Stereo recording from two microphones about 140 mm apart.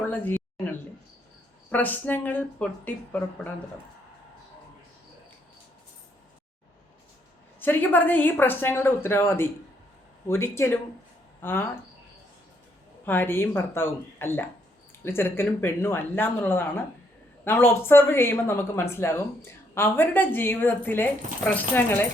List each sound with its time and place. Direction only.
0.0 s a sound: 15° left (ahead or behind)
1.7 s speech: 10° left (ahead or behind)
7.6 s speech: 15° left (ahead or behind)
13.1 s speech: 15° left (ahead or behind)